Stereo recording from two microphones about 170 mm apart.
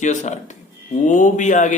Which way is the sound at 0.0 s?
45° left (ahead or behind).